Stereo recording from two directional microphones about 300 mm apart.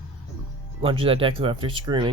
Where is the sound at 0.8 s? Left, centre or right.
Centre.